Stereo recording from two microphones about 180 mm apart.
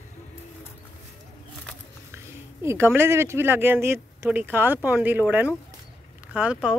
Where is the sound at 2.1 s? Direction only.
15° right (ahead or behind).